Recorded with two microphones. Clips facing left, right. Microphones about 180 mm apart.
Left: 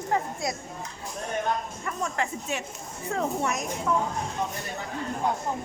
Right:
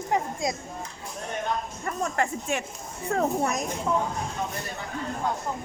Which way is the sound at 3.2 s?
40° right (ahead or behind).